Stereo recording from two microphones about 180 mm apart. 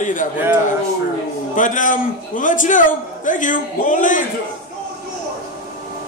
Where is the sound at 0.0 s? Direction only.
45° left (ahead or behind).